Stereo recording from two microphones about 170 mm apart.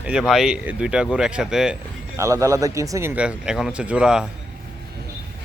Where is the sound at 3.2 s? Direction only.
5° right (ahead or behind).